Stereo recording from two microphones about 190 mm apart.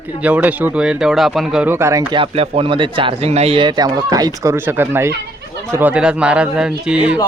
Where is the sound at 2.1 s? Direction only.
30° right (ahead or behind); by 7.2 s 5° right (ahead or behind).